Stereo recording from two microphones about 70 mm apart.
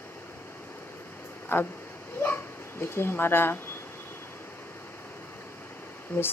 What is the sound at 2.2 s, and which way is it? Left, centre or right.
Dog, left.